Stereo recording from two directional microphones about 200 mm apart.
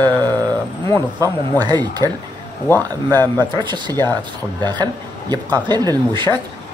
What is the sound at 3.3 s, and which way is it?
Speech, 20° right (ahead or behind).